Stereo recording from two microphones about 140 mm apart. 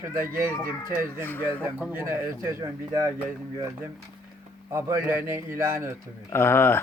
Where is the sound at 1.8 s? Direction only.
15° right (ahead or behind).